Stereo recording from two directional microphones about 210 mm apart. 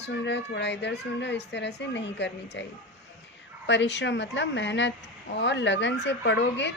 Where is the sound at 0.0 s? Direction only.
55° left (ahead or behind).